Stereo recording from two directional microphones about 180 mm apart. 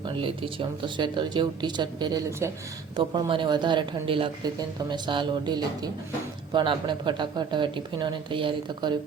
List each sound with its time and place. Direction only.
0.0 s speech: 30° right (ahead or behind)